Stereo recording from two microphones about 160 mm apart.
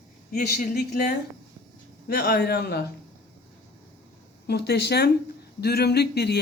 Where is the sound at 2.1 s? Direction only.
65° left (ahead or behind).